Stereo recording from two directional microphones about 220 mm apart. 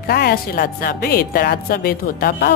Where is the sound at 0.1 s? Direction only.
45° left (ahead or behind).